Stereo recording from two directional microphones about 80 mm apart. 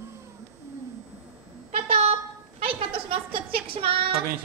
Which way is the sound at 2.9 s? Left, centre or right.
Right.